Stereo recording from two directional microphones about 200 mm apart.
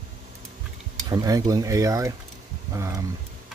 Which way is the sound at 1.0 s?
20° right (ahead or behind).